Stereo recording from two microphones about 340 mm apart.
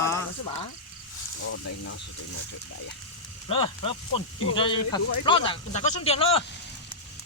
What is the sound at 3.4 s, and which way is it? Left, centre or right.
Speech, centre.